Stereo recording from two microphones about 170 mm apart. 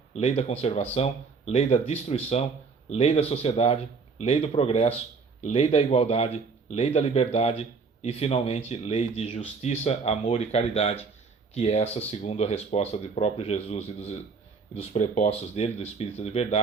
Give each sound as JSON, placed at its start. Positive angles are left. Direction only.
{"t": 0.1, "sound": "speech", "side_deg": 35}